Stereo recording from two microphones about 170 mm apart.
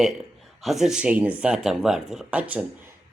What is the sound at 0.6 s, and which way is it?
Speech, centre (ahead or behind).